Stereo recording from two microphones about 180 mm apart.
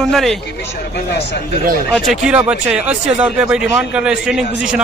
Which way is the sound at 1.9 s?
5° right (ahead or behind).